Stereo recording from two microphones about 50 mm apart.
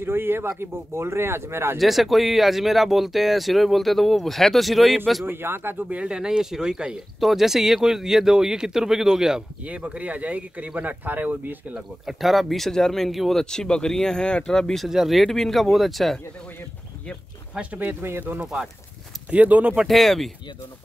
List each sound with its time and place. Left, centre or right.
0.0 s speech: right
1.8 s speech: centre
5.2 s speech: right
6.0 s speech: centre
7.2 s speech: centre
9.7 s speech: right
12.1 s speech: centre
13.4 s speech: centre
14.9 s speech: centre
19.3 s speech: right
19.9 s speech: centre